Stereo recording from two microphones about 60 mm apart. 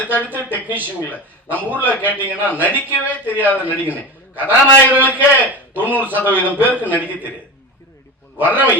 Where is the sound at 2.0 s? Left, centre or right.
Right.